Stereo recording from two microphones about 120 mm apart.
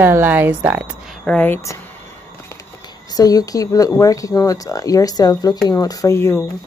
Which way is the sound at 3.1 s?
30° left (ahead or behind).